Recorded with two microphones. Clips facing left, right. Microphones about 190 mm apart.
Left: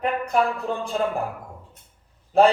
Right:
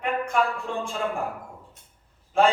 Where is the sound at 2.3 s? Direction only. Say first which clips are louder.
Left 4 dB; 35° left (ahead or behind).